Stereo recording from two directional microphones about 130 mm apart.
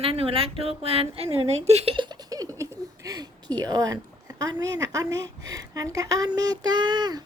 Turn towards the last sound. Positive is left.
turn(degrees=-35)  # may be behind; listen again after turning